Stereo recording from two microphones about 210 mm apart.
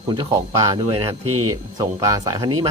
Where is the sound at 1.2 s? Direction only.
90° right.